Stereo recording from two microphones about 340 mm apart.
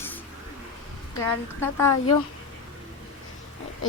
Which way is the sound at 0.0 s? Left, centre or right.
Centre.